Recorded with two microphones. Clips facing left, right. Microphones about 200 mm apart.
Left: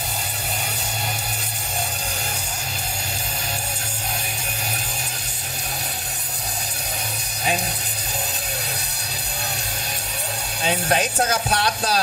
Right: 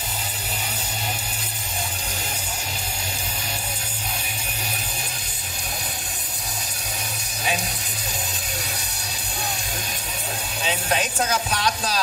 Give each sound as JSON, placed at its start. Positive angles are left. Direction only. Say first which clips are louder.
{"t": 10.6, "sound": "speech", "louder": "left 4 dB", "side_deg": 40}